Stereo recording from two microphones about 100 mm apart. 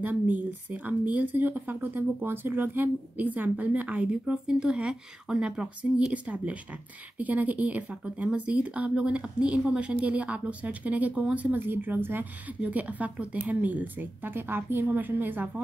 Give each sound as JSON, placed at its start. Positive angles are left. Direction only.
{"t": 0.0, "sound": "a woman's voice", "side_deg": -20}